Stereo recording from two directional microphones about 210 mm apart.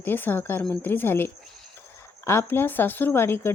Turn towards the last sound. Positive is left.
turn(degrees=10)  # may be behind; listen again after turning